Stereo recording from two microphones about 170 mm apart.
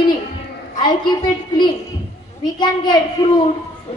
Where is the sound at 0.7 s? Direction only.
25° left (ahead or behind).